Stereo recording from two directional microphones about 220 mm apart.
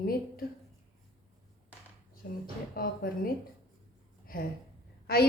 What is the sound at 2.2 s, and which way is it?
A woman's voice, 45° left (ahead or behind).